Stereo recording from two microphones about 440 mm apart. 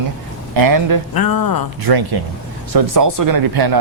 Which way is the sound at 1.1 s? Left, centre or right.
Left.